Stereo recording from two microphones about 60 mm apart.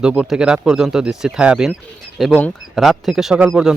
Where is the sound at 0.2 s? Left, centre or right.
Centre.